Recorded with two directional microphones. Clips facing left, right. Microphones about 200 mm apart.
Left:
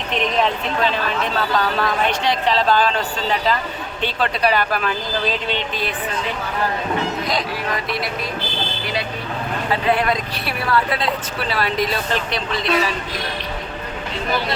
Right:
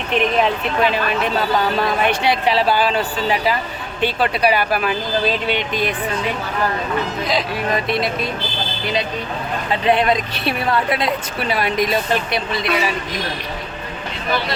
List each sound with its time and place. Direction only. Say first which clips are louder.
0.1 s speech: right 3 dB; 5° right (ahead or behind)
7.7 s speech: right 4 dB; 25° right (ahead or behind)
9.8 s speech: right 5 dB; 20° right (ahead or behind)